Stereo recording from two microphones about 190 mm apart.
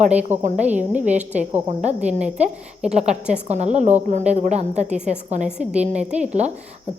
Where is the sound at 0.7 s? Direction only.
5° right (ahead or behind).